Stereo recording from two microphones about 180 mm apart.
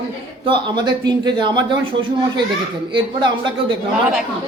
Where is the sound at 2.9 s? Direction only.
25° right (ahead or behind).